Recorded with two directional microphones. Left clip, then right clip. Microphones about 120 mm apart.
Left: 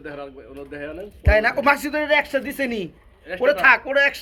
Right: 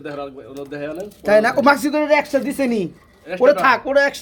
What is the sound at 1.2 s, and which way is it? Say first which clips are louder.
Speech: right 4 dB; 30° right (ahead or behind).